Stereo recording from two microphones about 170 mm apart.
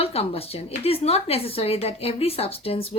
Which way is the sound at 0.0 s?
35° left (ahead or behind).